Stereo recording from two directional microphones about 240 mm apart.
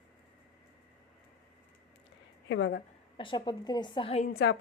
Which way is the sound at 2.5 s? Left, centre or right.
Left.